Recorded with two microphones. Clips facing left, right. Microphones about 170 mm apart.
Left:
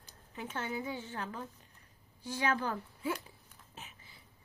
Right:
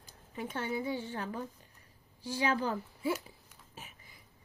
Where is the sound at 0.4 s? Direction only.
10° right (ahead or behind).